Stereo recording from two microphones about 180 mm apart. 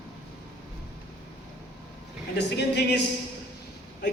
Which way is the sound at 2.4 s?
70° left (ahead or behind).